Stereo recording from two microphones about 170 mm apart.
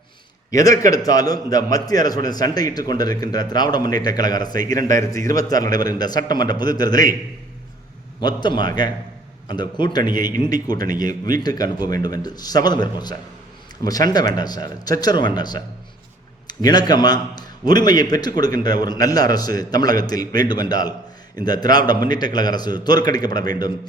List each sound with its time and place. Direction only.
0.5 s a man's voice: 20° left (ahead or behind)
8.2 s a man's voice: 25° left (ahead or behind)